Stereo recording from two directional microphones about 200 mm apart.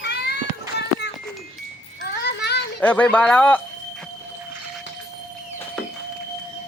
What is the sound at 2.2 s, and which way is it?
Children playing, 55° left (ahead or behind).